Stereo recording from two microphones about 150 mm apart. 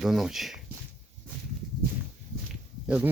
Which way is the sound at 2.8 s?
5° right (ahead or behind).